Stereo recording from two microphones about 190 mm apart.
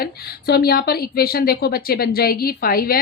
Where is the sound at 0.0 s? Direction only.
55° left (ahead or behind).